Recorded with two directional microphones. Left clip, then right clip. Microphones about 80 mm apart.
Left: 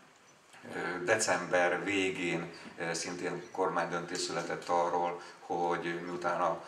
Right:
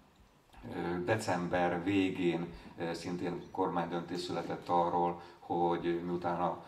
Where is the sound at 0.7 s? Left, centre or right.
Right.